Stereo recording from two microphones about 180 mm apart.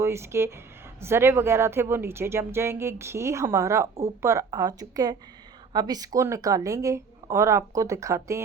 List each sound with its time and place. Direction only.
0.0 s a woman's voice: 15° right (ahead or behind)